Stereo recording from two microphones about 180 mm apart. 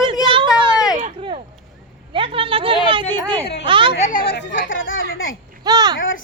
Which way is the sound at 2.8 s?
25° right (ahead or behind).